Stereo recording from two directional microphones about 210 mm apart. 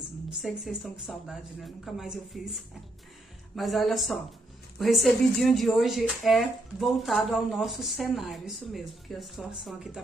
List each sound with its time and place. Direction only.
0.4 s speech: 5° right (ahead or behind)